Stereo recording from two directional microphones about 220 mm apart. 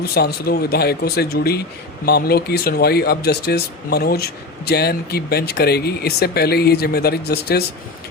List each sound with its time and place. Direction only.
0.0 s speech: 45° left (ahead or behind)